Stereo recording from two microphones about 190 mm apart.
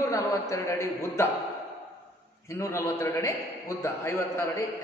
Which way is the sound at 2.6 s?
15° left (ahead or behind).